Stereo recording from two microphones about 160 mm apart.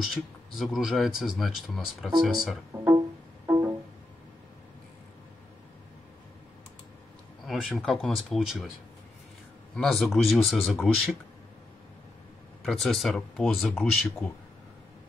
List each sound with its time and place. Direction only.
0.1 s speech: centre (ahead or behind)
2.7 s music: 15° right (ahead or behind)
7.4 s speech: centre (ahead or behind)
9.8 s speech: centre (ahead or behind)
12.6 s speech: centre (ahead or behind)